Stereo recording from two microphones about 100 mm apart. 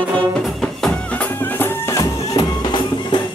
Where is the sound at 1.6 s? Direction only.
30° left (ahead or behind).